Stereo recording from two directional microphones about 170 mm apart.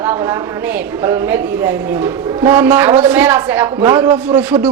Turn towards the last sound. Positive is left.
turn(degrees=-10)  # may be behind; listen again after turning